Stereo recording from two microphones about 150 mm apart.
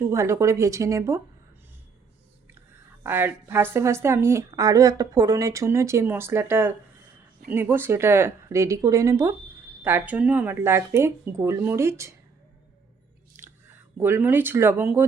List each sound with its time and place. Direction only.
0.0 s speech: 20° right (ahead or behind)
2.6 s a woman's voice: 15° right (ahead or behind)
13.3 s a sound: 15° right (ahead or behind)
14.0 s a woman's voice: 15° right (ahead or behind)